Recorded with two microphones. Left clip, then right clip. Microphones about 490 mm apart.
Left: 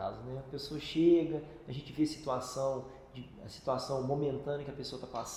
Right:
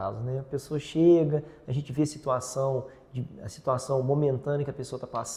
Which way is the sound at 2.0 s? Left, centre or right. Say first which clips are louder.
Right 6 dB; right.